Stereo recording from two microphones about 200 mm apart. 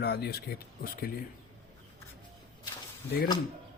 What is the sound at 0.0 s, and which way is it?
Speech, 55° left (ahead or behind).